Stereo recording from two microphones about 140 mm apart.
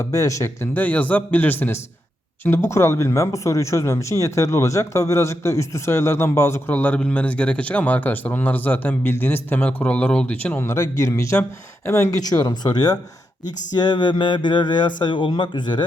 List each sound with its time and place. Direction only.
0.0 s speech: 20° left (ahead or behind)